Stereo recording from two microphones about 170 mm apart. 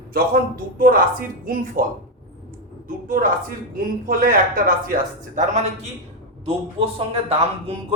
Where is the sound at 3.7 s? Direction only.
55° right (ahead or behind).